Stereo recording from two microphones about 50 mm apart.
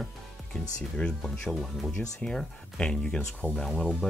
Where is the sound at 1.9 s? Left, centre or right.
Centre.